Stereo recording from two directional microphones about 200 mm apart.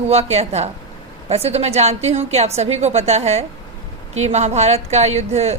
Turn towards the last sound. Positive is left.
turn(degrees=-35)  # may be behind; listen again after turning